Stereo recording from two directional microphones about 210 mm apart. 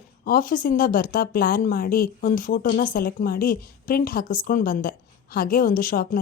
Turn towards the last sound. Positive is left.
turn(degrees=40)  # may be behind; listen again after turning